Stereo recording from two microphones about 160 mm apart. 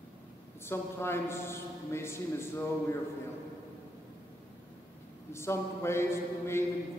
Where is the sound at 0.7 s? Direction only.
15° left (ahead or behind).